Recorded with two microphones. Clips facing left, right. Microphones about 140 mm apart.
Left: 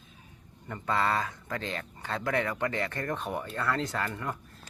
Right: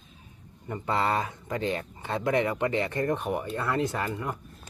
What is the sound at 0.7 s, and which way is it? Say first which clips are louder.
Speech: right 2 dB; 20° right (ahead or behind).